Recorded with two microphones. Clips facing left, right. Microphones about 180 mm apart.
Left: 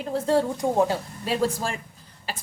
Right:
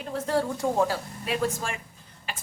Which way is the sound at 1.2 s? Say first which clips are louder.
Left 3 dB; 30° left (ahead or behind).